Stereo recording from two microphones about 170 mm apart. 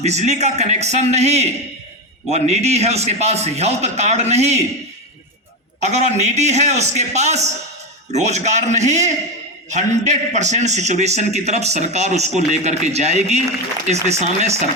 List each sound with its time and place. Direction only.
0.0 s a man's voice: 40° right (ahead or behind)
5.8 s a man's voice: 40° right (ahead or behind)